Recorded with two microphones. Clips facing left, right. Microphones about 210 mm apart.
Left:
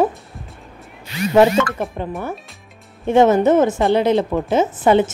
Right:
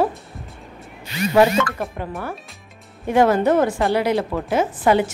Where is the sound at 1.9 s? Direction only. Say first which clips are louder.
Left 3 dB; 20° left (ahead or behind).